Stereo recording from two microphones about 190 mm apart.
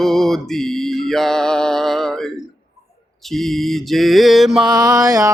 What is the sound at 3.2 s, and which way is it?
Mantra, centre (ahead or behind).